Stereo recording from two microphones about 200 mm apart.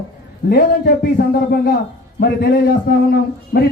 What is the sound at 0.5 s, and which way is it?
A man's voice, 55° left (ahead or behind).